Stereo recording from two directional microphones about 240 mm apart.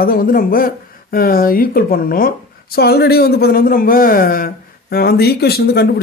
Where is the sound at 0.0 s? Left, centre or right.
Left.